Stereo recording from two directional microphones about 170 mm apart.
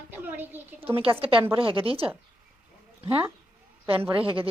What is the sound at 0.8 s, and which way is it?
A woman's voice, 35° right (ahead or behind).